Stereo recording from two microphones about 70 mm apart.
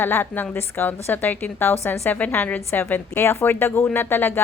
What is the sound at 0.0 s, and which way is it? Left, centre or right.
A woman's voice, left.